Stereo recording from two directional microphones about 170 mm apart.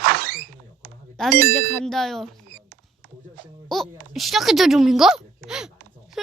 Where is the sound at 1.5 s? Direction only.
Centre (ahead or behind).